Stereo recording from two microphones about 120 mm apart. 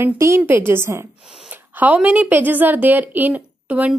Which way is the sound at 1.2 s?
5° right (ahead or behind).